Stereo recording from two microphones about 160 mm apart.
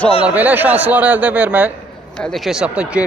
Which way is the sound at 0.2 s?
10° right (ahead or behind).